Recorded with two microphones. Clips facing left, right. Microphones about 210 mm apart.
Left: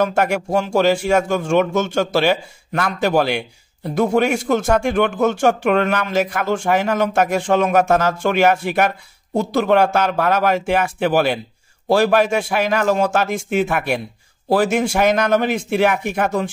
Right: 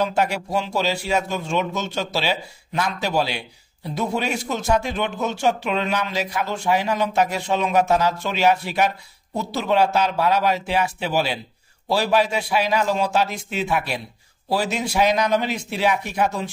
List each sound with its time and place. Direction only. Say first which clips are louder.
0.0 s a man's voice: left 4 dB; 50° left (ahead or behind)